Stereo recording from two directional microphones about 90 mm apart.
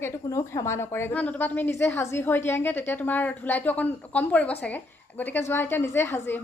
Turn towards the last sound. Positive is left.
turn(degrees=30)  # may be behind; listen again after turning